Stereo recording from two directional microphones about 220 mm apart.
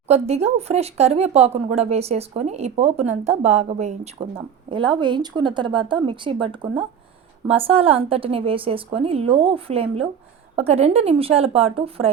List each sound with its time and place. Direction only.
0.1 s speech: 30° right (ahead or behind)